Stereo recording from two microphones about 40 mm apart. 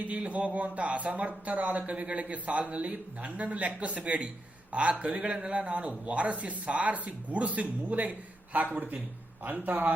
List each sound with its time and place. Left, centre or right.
0.3 s a man's voice: right